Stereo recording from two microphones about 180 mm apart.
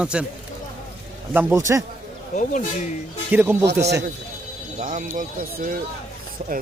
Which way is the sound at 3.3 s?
10° right (ahead or behind).